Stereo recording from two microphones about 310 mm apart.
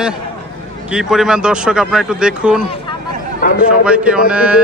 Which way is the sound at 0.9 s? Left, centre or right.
Centre.